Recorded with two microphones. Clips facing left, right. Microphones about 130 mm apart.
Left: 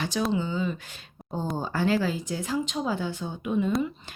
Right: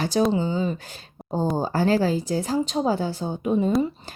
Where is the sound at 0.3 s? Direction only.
35° right (ahead or behind).